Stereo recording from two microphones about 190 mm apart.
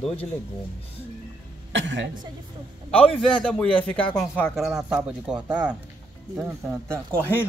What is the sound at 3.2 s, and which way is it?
Speech, 5° left (ahead or behind).